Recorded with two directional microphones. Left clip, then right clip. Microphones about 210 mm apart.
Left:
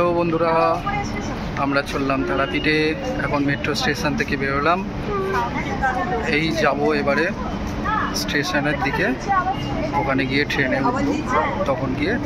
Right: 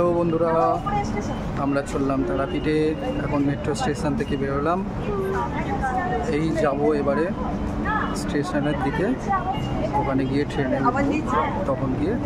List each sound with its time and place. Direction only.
0.0 s a sound: 10° right (ahead or behind)
1.6 s speech: 10° right (ahead or behind)
6.3 s speech: 15° right (ahead or behind)
8.4 s speech: 15° right (ahead or behind)
10.1 s speech: 15° right (ahead or behind)